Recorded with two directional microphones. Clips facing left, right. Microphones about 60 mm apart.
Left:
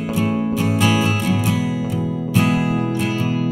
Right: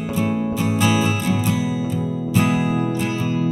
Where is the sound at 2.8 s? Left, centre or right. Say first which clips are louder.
Left 1 dB; left.